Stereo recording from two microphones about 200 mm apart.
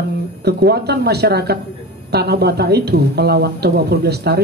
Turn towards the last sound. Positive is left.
turn(degrees=-55)  # may be behind; listen again after turning